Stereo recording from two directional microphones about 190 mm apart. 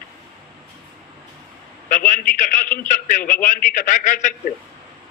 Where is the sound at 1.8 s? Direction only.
45° left (ahead or behind).